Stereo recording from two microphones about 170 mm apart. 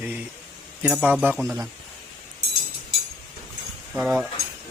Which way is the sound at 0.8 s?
5° right (ahead or behind).